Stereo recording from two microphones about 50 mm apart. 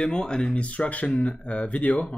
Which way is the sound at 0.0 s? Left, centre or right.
Centre.